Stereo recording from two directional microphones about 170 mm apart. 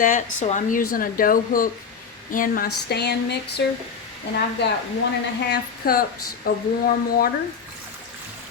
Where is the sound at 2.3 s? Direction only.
55° left (ahead or behind); by 3.3 s 75° left (ahead or behind).